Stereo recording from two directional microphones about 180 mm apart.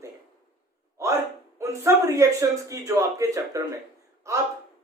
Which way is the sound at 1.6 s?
15° right (ahead or behind).